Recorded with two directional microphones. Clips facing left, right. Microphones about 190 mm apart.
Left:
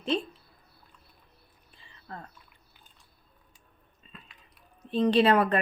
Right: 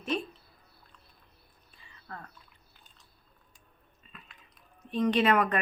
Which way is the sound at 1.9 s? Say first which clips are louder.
Left 2 dB; 30° left (ahead or behind).